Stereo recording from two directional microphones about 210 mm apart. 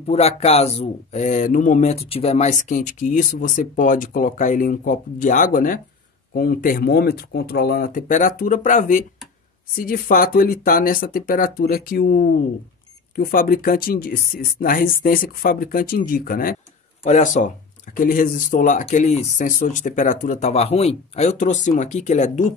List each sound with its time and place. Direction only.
0.0 s speech: 30° left (ahead or behind)